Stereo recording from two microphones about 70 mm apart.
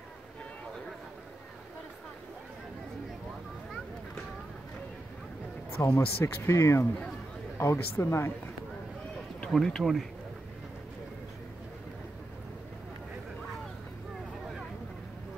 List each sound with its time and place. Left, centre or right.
5.8 s speech: left
9.5 s speech: centre